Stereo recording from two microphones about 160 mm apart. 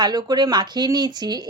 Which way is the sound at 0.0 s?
25° right (ahead or behind).